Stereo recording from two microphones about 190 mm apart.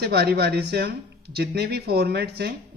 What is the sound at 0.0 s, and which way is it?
Speech, 55° right (ahead or behind).